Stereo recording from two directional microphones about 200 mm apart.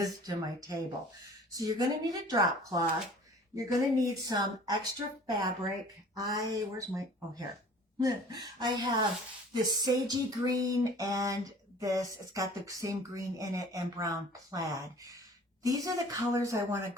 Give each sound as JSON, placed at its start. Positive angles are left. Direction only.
{"t": 0.0, "sound": "speech", "side_deg": -20}